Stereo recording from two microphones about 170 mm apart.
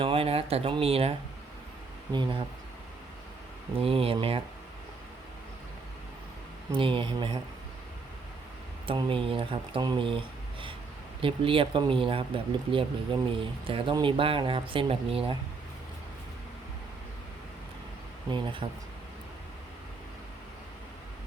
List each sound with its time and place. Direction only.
0.0 s speech: 35° right (ahead or behind)
2.1 s speech: 25° right (ahead or behind)
3.8 s speech: 35° right (ahead or behind)
6.7 s speech: 30° right (ahead or behind)
8.9 s speech: 30° right (ahead or behind)
18.3 s speech: 30° right (ahead or behind)